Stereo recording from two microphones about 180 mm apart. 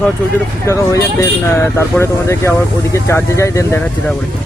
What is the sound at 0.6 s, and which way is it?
A man's voice, 15° left (ahead or behind).